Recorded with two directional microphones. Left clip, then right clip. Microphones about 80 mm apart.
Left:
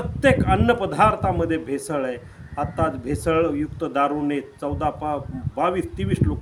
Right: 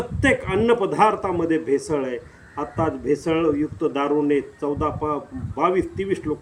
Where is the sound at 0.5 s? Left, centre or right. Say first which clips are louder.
Right 1 dB; centre.